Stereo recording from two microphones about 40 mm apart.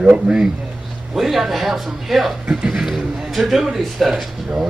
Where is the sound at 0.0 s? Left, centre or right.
Right.